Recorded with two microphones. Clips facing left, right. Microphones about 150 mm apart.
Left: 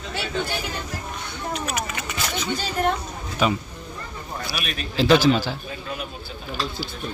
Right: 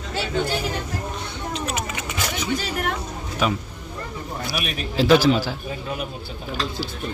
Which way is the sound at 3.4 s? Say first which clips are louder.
Left 1 dB; centre (ahead or behind).